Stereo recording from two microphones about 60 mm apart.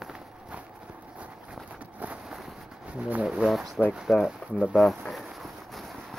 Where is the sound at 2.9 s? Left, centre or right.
Right.